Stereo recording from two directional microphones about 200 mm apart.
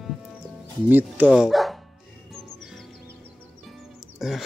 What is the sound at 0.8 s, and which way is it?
Speech, 10° right (ahead or behind).